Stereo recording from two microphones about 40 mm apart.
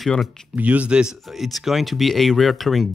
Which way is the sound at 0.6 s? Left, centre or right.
Right.